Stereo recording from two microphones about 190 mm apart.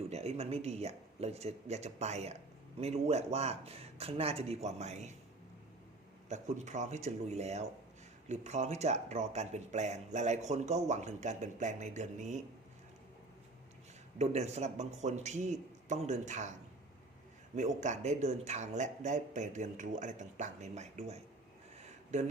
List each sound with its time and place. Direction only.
0.1 s speech: 35° right (ahead or behind)
6.2 s speech: 40° right (ahead or behind)
14.2 s speech: 35° right (ahead or behind)